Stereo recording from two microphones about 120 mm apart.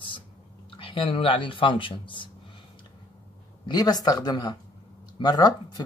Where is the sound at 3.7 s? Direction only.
35° left (ahead or behind).